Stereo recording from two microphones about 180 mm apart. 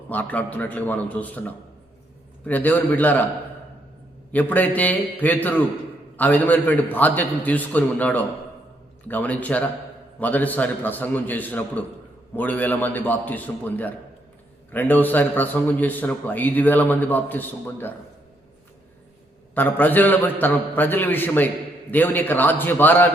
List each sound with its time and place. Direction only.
0.1 s a man's voice: 10° left (ahead or behind)
4.3 s a man's voice: 10° left (ahead or behind)
19.5 s a man's voice: 10° left (ahead or behind)